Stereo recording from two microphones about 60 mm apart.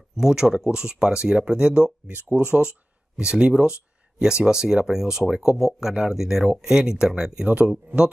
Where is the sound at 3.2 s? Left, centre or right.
Centre.